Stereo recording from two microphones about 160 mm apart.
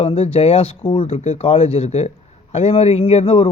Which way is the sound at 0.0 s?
40° left (ahead or behind).